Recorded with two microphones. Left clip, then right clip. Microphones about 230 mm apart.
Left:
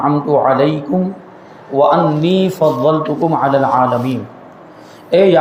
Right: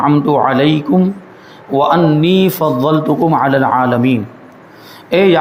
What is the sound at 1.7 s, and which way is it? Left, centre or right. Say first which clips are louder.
Speech: even; right.